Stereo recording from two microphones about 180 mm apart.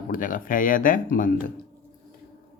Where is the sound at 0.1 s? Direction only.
50° left (ahead or behind).